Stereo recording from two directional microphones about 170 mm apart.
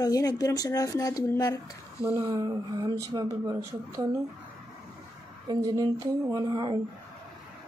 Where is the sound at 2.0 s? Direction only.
15° right (ahead or behind).